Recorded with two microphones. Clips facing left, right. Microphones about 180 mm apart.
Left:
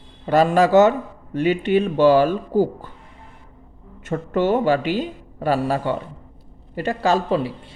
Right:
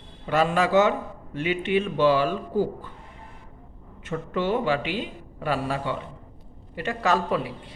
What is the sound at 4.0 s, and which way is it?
A man's voice, 45° left (ahead or behind).